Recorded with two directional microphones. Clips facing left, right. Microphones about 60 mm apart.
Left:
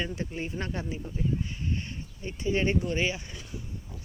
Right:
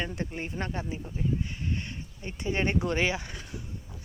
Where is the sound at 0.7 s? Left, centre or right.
Right.